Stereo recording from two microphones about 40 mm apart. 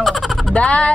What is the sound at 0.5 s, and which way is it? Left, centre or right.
Speech, left.